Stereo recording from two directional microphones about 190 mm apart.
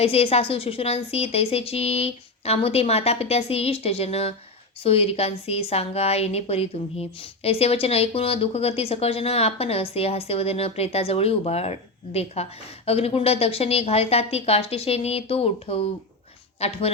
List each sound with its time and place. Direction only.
0.0 s a woman's voice: 30° left (ahead or behind)